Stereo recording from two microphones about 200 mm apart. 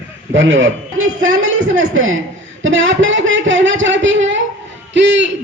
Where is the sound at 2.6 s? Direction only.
70° right (ahead or behind).